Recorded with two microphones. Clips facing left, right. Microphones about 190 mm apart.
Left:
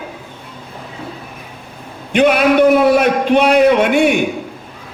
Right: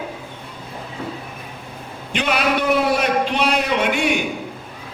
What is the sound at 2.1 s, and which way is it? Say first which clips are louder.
A man's voice: left 9 dB; 50° left (ahead or behind).